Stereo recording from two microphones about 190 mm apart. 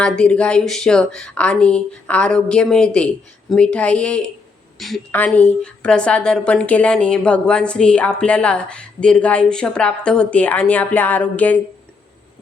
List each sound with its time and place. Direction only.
0.0 s a woman's voice: 5° left (ahead or behind)